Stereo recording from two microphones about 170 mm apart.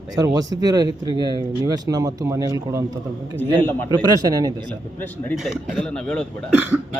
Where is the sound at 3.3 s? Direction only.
10° left (ahead or behind).